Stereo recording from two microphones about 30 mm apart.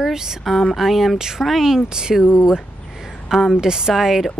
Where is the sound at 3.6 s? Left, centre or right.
Right.